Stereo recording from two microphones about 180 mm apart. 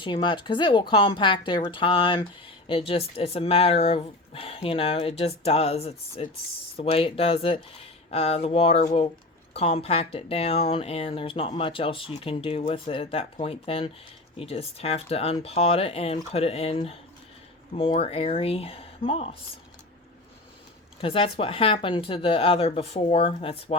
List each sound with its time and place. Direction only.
0.0 s speech: 25° left (ahead or behind)
21.0 s speech: 30° left (ahead or behind)